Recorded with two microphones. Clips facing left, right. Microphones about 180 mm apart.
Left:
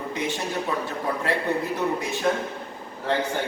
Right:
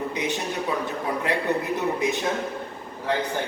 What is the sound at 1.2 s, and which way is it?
Speech, 20° right (ahead or behind).